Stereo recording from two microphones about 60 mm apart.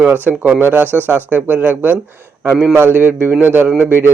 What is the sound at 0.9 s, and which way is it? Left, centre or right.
Speech, left.